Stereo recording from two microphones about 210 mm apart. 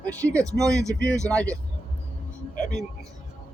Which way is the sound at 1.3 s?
5° left (ahead or behind).